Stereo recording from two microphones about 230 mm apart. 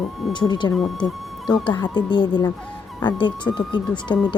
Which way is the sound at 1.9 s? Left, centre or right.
Left.